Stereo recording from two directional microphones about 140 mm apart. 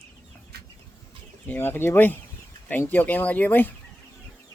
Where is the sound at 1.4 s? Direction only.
15° left (ahead or behind).